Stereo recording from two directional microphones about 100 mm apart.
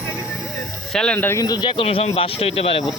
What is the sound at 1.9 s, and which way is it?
Speech, 75° left (ahead or behind).